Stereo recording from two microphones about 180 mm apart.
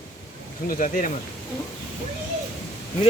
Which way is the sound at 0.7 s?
50° left (ahead or behind).